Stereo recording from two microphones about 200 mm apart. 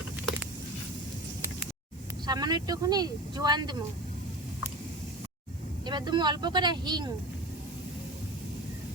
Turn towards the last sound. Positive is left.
turn(degrees=-20)  # may be behind; listen again after turning